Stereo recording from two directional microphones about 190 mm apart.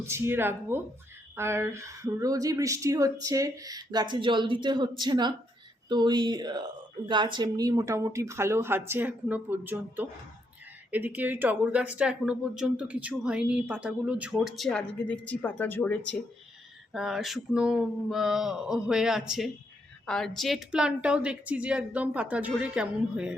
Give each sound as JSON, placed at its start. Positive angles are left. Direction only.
{"t": 0.0, "sound": "a woman's voice", "side_deg": -15}
{"t": 16.9, "sound": "speech", "side_deg": 0}